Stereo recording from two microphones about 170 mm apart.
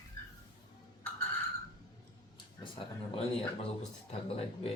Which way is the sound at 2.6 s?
30° left (ahead or behind).